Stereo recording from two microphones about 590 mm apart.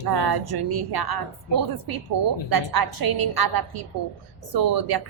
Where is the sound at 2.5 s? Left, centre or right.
Right.